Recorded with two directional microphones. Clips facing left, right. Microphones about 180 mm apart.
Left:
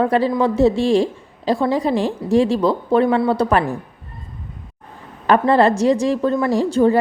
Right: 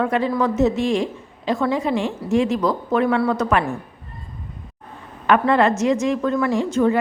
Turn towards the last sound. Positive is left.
turn(degrees=35)  # may be behind; listen again after turning